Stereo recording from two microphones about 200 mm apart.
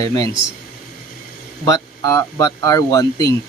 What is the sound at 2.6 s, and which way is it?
Speech, 15° left (ahead or behind).